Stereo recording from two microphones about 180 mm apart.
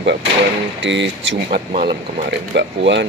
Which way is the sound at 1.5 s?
40° right (ahead or behind).